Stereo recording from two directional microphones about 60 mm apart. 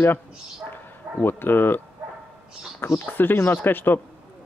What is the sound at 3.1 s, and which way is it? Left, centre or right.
Speech, left.